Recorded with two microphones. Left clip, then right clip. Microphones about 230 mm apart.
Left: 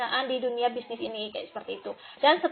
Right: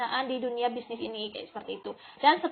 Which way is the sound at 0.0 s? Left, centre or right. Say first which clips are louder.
Left 2 dB; right.